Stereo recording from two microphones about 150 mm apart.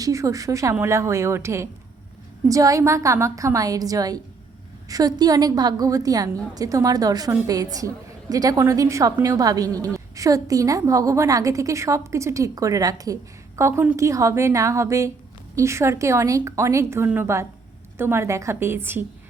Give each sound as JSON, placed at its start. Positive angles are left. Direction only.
{"t": 0.0, "sound": "a woman's voice", "side_deg": -20}